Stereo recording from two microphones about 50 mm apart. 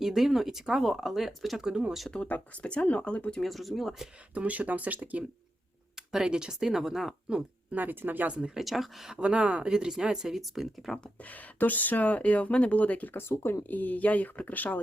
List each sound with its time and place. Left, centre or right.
0.0 s speech: centre
1.6 s speech: right
2.2 s speech: left
3.4 s speech: centre
4.4 s speech: right
6.0 s speech: centre
7.3 s speech: centre
7.8 s speech: right
8.3 s speech: centre
8.5 s speech: centre
9.0 s speech: centre
11.2 s speech: left
13.1 s speech: left
13.7 s speech: left